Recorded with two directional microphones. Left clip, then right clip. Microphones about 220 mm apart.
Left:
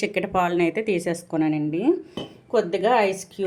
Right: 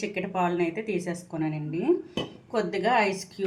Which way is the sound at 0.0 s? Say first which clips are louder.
Left 5 dB; 50° left (ahead or behind).